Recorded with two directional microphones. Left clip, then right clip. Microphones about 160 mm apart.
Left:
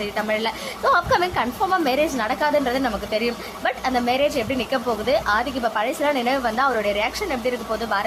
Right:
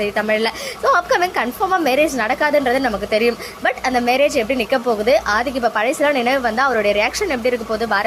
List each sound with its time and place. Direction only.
0.0 s a woman's voice: 20° right (ahead or behind)